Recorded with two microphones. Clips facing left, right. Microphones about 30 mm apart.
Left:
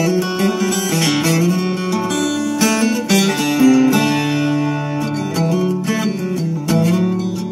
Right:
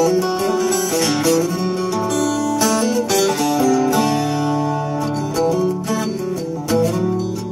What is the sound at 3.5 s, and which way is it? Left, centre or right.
Music, left.